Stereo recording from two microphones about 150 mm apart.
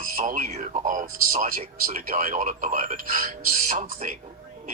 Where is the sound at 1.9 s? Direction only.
75° right (ahead or behind).